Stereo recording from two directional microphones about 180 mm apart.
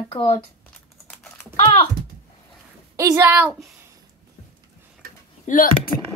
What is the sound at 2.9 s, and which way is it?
Speech, 15° right (ahead or behind).